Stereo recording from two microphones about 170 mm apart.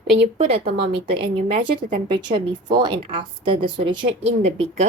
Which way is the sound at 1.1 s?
30° right (ahead or behind).